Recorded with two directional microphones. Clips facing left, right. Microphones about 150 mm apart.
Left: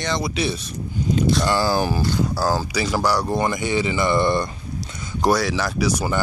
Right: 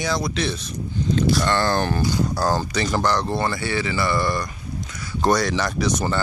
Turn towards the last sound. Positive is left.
turn(degrees=10)  # may be behind; listen again after turning